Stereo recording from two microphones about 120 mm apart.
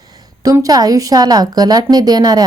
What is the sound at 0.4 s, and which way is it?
A woman's voice, 30° right (ahead or behind).